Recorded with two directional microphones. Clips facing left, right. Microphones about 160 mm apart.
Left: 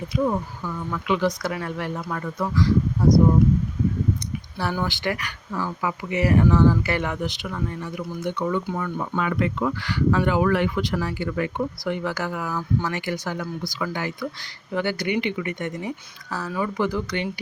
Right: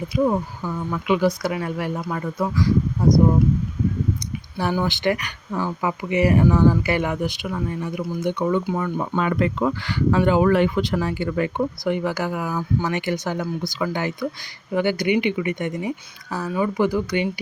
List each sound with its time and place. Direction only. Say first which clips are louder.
0.2 s speech: right 3 dB; 25° right (ahead or behind)
4.5 s speech: right 4 dB; 15° right (ahead or behind)
8.7 s speech: right 3 dB; 25° right (ahead or behind)